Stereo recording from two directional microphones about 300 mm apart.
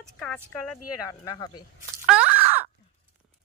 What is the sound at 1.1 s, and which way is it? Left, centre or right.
Speech, centre.